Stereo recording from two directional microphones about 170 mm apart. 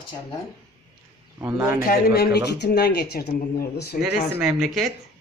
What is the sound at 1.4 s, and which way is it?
Speech, 15° right (ahead or behind).